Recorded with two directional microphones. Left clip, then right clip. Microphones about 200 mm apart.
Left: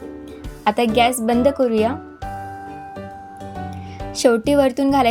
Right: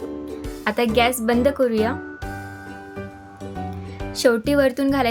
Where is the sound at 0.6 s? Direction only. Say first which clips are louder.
Left 3 dB; 10° left (ahead or behind).